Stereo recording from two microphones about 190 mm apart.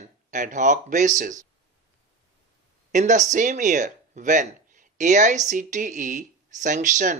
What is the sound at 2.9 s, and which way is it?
Speech, 40° right (ahead or behind).